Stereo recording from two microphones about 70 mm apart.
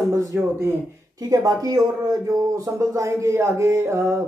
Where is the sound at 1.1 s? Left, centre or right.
Right.